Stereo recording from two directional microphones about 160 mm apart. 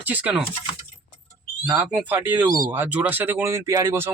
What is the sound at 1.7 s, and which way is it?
Speech, 10° right (ahead or behind).